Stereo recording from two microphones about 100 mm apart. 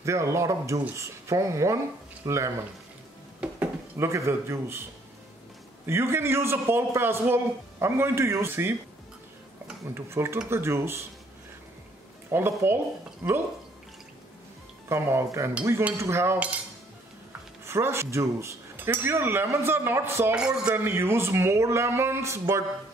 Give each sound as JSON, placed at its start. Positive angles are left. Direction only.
{"t": 0.0, "sound": "a man's voice", "side_deg": -30}
{"t": 3.3, "sound": "dishes", "side_deg": -15}
{"t": 4.0, "sound": "a man's voice", "side_deg": -30}
{"t": 5.9, "sound": "a man's voice", "side_deg": -25}
{"t": 9.9, "sound": "a man's voice", "side_deg": -25}
{"t": 12.3, "sound": "a man's voice", "side_deg": -25}
{"t": 14.9, "sound": "a man's voice", "side_deg": -25}
{"t": 17.6, "sound": "a man's voice", "side_deg": -25}
{"t": 20.3, "sound": "speech", "side_deg": -10}
{"t": 20.7, "sound": "a man's voice", "side_deg": -25}